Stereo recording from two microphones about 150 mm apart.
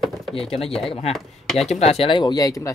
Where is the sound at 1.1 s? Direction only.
Centre (ahead or behind).